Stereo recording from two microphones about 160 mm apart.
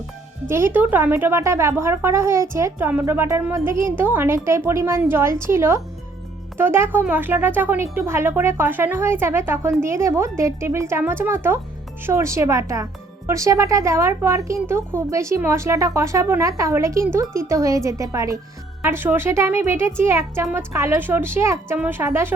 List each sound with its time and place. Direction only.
0.4 s a woman's voice: 15° right (ahead or behind)